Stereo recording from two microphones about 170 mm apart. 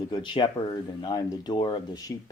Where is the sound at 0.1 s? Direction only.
25° left (ahead or behind).